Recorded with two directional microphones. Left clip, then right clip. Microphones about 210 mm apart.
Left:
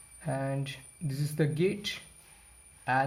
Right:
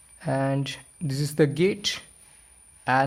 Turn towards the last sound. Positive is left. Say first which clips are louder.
# right 6 dB
turn(degrees=-45)  # may be behind; listen again after turning